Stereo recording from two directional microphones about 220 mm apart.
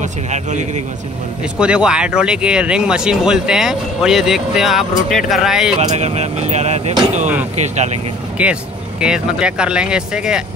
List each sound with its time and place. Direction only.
0.0 s speech: 35° right (ahead or behind)
1.4 s speech: 5° right (ahead or behind)
5.9 s speech: 30° right (ahead or behind)
8.4 s speech: 5° right (ahead or behind)